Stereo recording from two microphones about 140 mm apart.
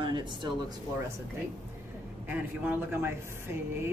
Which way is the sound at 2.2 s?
15° right (ahead or behind).